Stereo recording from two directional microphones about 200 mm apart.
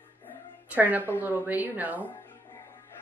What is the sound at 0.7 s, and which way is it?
Speech, 10° right (ahead or behind).